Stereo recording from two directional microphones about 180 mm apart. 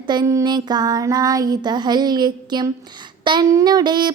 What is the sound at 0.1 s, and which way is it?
Speech, 20° right (ahead or behind).